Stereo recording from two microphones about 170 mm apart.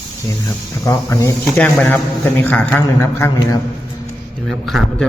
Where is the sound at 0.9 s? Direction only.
15° left (ahead or behind).